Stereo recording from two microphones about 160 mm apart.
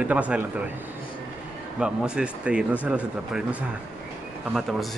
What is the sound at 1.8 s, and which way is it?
A man's voice, 5° right (ahead or behind).